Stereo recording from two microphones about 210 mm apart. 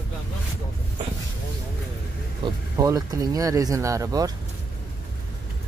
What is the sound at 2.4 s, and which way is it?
Speech, 20° right (ahead or behind).